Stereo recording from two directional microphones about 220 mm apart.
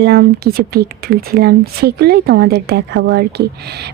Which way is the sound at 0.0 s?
45° right (ahead or behind).